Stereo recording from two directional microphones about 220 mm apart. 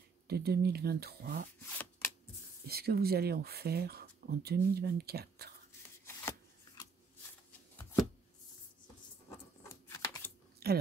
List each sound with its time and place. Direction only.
0.3 s speech: 45° right (ahead or behind)
1.7 s shuffling cards: 10° left (ahead or behind)
2.6 s speech: 45° right (ahead or behind)
9.8 s a sound: 10° left (ahead or behind)
10.6 s chewing: 45° right (ahead or behind)